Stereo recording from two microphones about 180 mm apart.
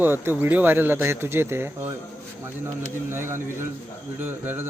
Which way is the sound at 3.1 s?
15° right (ahead or behind).